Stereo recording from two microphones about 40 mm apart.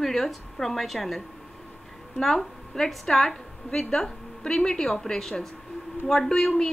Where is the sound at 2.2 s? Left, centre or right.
Centre.